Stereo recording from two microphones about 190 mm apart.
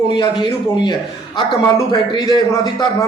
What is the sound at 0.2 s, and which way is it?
A man's voice, 25° left (ahead or behind).